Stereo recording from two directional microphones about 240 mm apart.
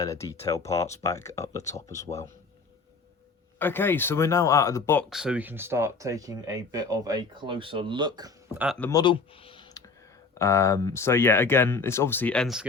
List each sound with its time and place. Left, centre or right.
0.0 s speech: centre
3.6 s speech: centre
5.0 s speech: centre
8.5 s speech: centre
8.8 s speech: centre